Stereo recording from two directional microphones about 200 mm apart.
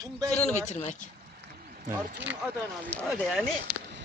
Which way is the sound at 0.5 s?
35° left (ahead or behind).